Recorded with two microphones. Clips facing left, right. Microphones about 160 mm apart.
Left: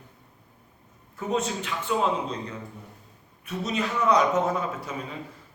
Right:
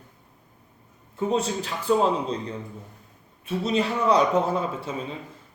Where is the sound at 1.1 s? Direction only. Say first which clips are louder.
Right 3 dB; 30° right (ahead or behind).